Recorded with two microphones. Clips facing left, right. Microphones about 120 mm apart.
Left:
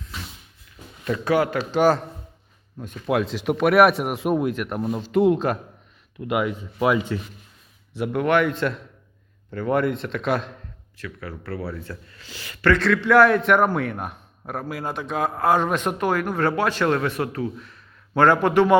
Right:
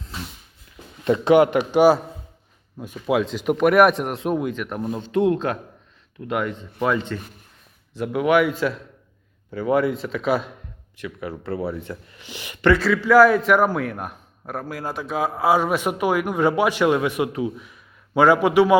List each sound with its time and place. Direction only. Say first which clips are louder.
1.0 s speech: right 6 dB; 25° right (ahead or behind); by 7.2 s 10° left (ahead or behind)
7.9 s speech: right 2 dB; centre (ahead or behind)
10.9 s speech: right 4 dB; 20° right (ahead or behind)
12.8 s a man's voice: right 1 dB; 5° right (ahead or behind)